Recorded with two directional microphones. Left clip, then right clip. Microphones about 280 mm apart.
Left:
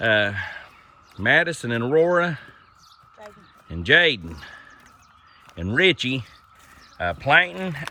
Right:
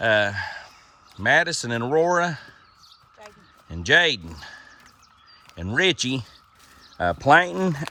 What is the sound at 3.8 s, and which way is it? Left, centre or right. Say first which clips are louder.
Speech: left 1 dB; centre.